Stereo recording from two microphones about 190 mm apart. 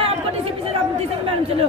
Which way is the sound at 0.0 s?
30° right (ahead or behind).